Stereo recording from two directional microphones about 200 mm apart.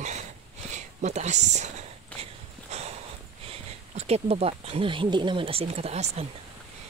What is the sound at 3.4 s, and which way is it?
Speech, 30° right (ahead or behind).